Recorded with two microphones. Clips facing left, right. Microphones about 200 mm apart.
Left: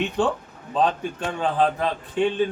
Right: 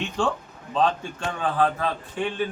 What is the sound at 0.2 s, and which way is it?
A man's voice, 20° left (ahead or behind).